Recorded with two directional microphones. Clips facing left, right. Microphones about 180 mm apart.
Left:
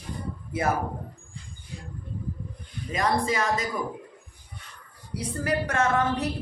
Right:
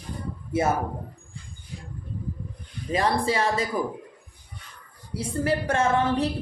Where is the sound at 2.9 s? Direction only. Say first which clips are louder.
Right 2 dB; 30° right (ahead or behind).